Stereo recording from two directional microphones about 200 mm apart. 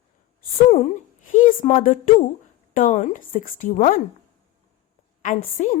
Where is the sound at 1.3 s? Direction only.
40° left (ahead or behind).